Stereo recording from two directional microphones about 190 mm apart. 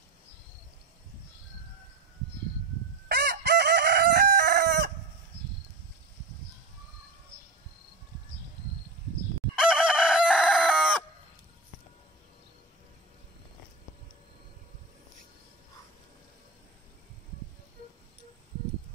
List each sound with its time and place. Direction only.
3.1 s chicken: 55° right (ahead or behind)
9.6 s chicken: 5° right (ahead or behind)